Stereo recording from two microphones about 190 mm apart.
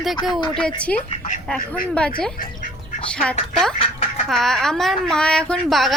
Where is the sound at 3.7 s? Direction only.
30° left (ahead or behind).